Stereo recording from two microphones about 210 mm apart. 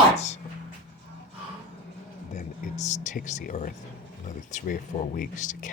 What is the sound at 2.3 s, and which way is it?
Speech, 35° left (ahead or behind).